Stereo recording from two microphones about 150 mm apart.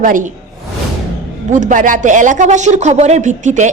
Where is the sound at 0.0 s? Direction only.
65° right (ahead or behind).